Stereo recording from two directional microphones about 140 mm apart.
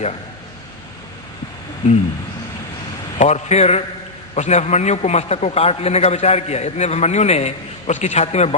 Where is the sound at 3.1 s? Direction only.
55° left (ahead or behind).